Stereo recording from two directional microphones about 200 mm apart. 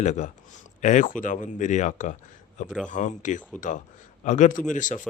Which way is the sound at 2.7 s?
5° left (ahead or behind).